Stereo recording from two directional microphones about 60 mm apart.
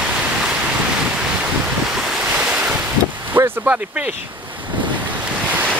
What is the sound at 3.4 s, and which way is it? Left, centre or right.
Vehicle, right.